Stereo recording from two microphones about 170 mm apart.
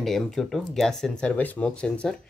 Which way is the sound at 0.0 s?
Centre (ahead or behind).